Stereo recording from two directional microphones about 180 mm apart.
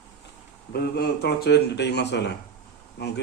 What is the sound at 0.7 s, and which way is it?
Speech, 60° left (ahead or behind).